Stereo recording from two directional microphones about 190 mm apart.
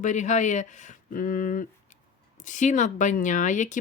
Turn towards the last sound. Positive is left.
turn(degrees=40)  # may be behind; listen again after turning